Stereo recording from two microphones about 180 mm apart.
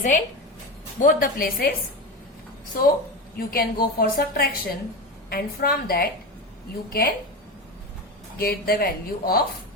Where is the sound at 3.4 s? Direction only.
55° left (ahead or behind).